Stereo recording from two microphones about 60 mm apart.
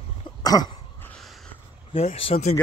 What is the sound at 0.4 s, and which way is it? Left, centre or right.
Throat clearing, left.